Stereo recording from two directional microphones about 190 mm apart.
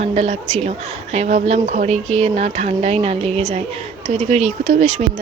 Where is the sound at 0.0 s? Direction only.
35° right (ahead or behind).